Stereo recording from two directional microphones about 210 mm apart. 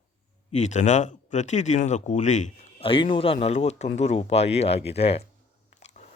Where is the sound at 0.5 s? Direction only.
35° left (ahead or behind).